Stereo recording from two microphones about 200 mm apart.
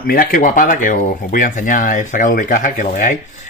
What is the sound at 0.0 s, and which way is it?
Speech, 45° left (ahead or behind).